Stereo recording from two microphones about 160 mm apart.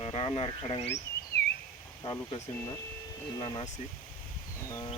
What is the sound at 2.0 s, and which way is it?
Speech, 30° left (ahead or behind).